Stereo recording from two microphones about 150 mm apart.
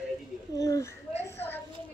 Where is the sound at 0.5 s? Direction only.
25° left (ahead or behind).